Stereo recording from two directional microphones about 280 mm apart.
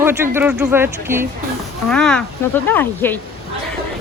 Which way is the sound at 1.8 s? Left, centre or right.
Centre.